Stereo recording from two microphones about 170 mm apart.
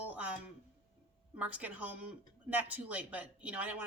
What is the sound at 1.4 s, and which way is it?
Speech, 10° right (ahead or behind).